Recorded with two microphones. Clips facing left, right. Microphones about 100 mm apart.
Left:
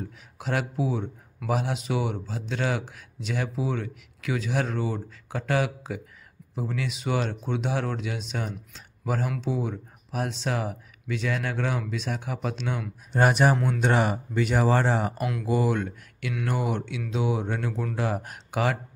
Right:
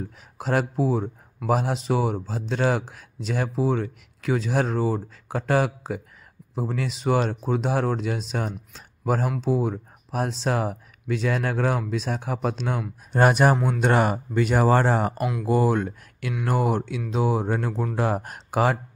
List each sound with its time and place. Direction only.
0.4 s speech: 35° right (ahead or behind)